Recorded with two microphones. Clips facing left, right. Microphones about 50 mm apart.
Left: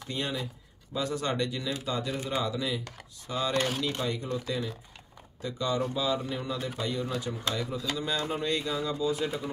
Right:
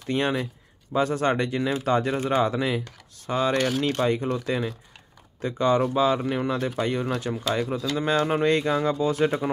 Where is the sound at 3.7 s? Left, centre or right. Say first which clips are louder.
Right 8 dB; right.